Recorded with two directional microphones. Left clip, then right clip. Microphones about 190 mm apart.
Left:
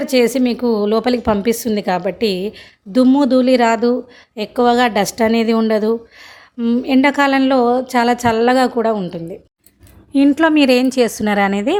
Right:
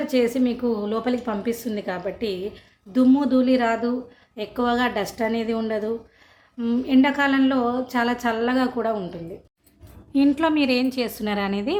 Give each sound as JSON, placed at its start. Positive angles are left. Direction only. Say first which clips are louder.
{"t": 0.0, "sound": "a woman's voice", "louder": "left 7 dB", "side_deg": 50}
{"t": 10.1, "sound": "a woman's voice", "louder": "left 7 dB", "side_deg": 30}